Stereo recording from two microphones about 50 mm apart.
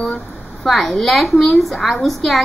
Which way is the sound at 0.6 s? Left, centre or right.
Centre.